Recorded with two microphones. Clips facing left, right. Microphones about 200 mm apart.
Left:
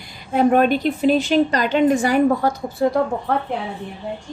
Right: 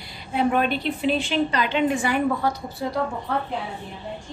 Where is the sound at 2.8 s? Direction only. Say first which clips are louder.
Left 8 dB; 55° left (ahead or behind).